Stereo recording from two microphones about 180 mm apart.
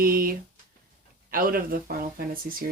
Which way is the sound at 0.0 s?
55° right (ahead or behind).